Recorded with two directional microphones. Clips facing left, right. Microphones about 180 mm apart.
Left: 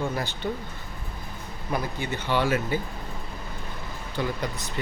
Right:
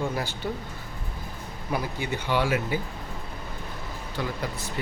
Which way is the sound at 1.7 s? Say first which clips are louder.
Even; 10° right (ahead or behind).